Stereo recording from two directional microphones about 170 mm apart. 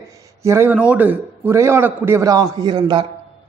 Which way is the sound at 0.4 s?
15° right (ahead or behind).